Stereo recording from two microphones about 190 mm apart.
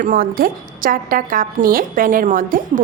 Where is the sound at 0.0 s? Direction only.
50° right (ahead or behind).